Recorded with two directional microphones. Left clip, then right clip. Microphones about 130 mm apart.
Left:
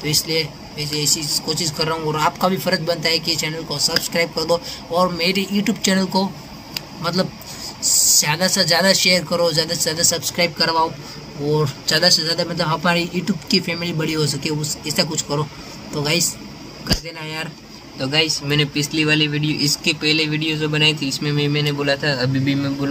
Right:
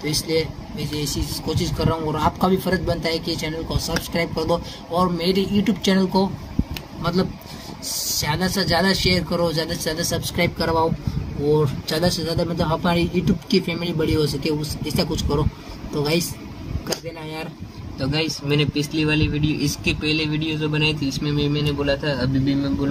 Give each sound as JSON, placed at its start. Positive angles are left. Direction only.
{"t": 0.3, "sound": "speech", "side_deg": -35}
{"t": 11.8, "sound": "speech", "side_deg": -30}
{"t": 17.9, "sound": "a man's voice", "side_deg": 15}